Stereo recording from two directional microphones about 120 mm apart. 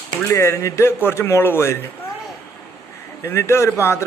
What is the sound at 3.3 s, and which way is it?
Speech, 20° left (ahead or behind).